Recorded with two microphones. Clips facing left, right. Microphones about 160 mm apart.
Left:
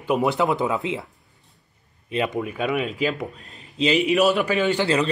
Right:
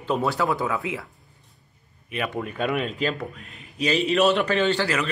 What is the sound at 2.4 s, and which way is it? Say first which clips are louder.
A man's voice: left 2 dB; 5° left (ahead or behind).